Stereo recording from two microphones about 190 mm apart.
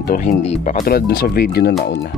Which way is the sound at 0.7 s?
50° left (ahead or behind).